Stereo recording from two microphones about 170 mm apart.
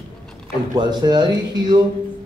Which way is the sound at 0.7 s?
25° right (ahead or behind).